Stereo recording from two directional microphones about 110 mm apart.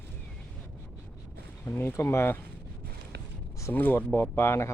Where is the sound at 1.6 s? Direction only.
25° left (ahead or behind).